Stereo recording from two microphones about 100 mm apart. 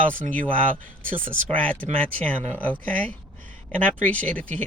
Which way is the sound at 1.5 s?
15° left (ahead or behind).